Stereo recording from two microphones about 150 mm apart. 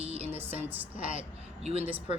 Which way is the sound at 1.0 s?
40° right (ahead or behind).